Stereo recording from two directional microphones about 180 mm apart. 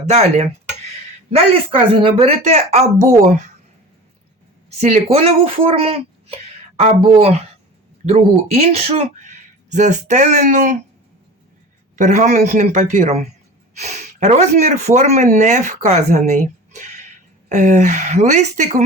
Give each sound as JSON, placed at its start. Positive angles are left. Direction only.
{"t": 0.0, "sound": "speech", "side_deg": -40}
{"t": 4.8, "sound": "speech", "side_deg": -35}
{"t": 11.9, "sound": "speech", "side_deg": -40}